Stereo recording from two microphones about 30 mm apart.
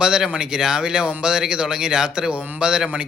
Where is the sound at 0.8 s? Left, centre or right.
Right.